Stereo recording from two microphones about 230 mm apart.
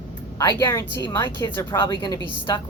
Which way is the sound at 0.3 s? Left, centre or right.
Centre.